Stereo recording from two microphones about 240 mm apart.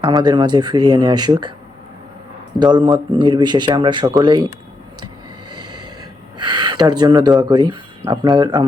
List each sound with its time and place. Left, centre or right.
0.0 s speech: centre
2.6 s speech: centre
6.4 s speech: centre